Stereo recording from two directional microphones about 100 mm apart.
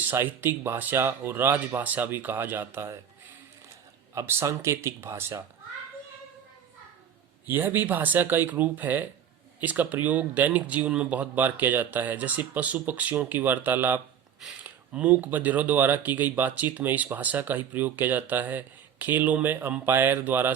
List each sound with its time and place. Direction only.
0.0 s speech: 20° right (ahead or behind)
4.1 s speech: 30° right (ahead or behind)
7.4 s speech: 20° right (ahead or behind)